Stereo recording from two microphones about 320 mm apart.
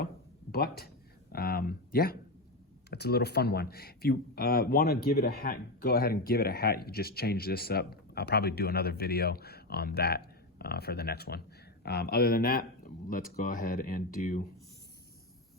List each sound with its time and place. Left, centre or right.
0.5 s speech: left